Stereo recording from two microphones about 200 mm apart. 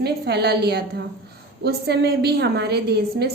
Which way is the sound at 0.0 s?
55° right (ahead or behind).